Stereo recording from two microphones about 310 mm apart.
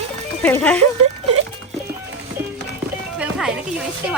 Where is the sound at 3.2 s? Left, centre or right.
Centre.